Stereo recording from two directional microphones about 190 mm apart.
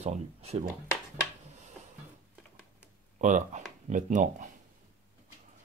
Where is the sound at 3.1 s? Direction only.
40° right (ahead or behind).